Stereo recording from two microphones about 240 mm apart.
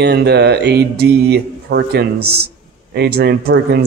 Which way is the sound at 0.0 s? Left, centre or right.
Right.